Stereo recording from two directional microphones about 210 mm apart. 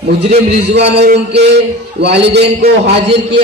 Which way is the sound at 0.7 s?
55° right (ahead or behind).